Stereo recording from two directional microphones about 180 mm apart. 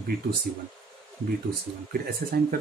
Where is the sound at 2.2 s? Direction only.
45° right (ahead or behind).